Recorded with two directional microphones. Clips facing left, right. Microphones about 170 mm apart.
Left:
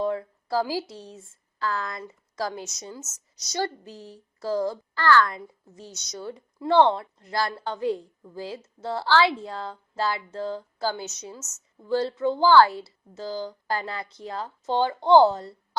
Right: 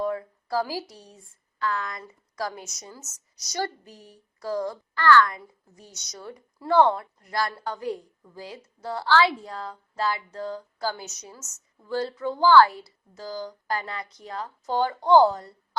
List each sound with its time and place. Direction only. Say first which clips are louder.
0.0 s a woman's voice: left 1 dB; 25° left (ahead or behind)